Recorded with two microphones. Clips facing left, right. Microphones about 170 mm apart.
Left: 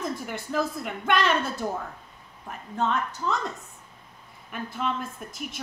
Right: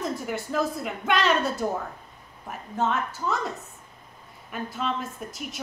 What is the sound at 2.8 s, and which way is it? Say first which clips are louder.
Speech: even; 5° right (ahead or behind).